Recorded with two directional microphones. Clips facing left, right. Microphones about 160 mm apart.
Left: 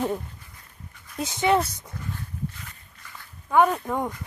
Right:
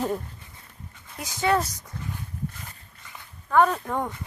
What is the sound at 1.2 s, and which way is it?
Speech, 20° left (ahead or behind).